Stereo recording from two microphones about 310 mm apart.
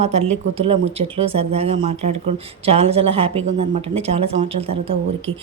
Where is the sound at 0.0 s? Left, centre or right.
Centre.